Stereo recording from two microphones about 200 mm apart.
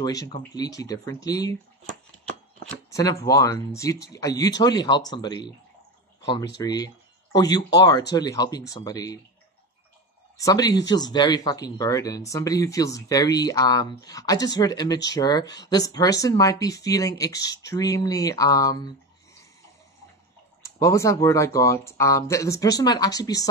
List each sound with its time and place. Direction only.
0.0 s speech: 20° left (ahead or behind)
2.9 s a sound: 15° left (ahead or behind)
3.2 s speech: 15° left (ahead or behind)
6.5 s speech: 20° left (ahead or behind)
10.3 s speech: 15° left (ahead or behind)
20.6 s speech: 15° left (ahead or behind)